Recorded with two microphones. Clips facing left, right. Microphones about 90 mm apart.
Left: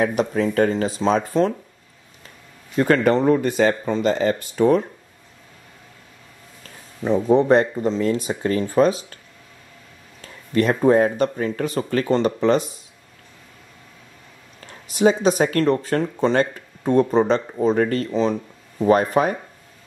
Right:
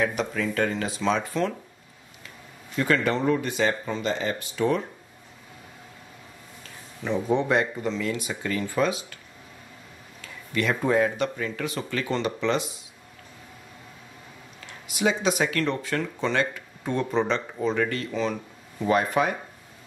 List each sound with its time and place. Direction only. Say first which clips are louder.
0.0 s speech: left 6 dB; 40° left (ahead or behind)
2.7 s speech: left 7 dB; 45° left (ahead or behind)
7.0 s speech: left 8 dB; 35° left (ahead or behind)
10.2 s speech: left 7 dB; 40° left (ahead or behind)
14.7 s speech: left 8 dB; 40° left (ahead or behind)